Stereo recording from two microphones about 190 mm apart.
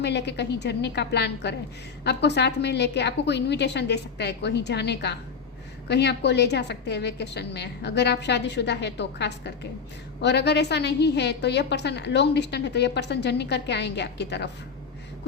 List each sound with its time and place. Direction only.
0.0 s a woman's voice: 65° left (ahead or behind)